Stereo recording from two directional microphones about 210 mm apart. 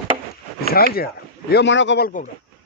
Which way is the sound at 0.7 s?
45° left (ahead or behind).